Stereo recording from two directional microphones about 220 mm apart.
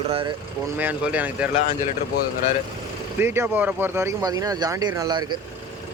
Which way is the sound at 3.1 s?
10° right (ahead or behind).